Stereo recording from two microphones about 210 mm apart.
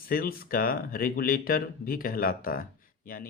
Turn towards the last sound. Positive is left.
turn(degrees=45)  # may be behind; listen again after turning